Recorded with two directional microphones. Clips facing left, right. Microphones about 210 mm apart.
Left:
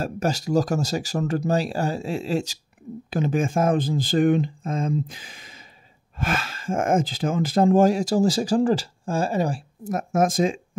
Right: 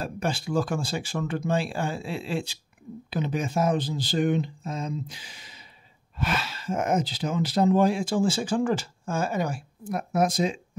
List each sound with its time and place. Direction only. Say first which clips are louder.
0.0 s speech: left 4 dB; 40° left (ahead or behind)